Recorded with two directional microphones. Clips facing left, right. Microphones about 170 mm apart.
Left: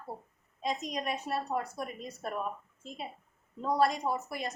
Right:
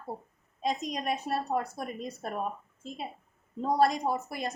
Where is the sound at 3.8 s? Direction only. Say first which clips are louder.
Right 2 dB; 40° right (ahead or behind).